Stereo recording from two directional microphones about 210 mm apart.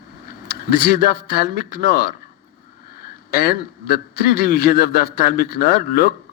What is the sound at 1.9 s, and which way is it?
Speech, 45° left (ahead or behind).